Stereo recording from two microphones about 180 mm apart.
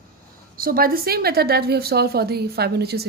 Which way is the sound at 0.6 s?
55° right (ahead or behind).